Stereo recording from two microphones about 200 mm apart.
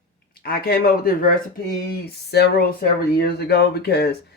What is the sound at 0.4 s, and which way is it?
Speech, 50° left (ahead or behind).